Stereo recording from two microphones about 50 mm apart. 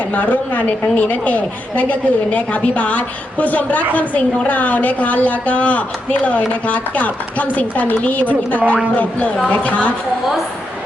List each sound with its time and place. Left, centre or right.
0.1 s a woman's voice: left